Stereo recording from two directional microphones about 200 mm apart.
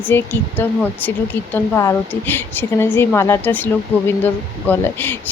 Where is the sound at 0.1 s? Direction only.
10° left (ahead or behind).